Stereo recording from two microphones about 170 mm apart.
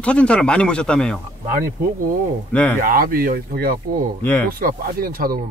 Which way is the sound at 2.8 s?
60° right (ahead or behind).